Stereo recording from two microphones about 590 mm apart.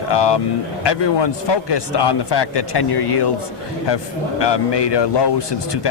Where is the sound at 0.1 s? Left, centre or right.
Left.